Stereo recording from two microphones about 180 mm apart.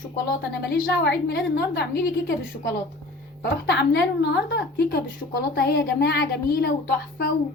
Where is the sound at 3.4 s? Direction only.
70° left (ahead or behind).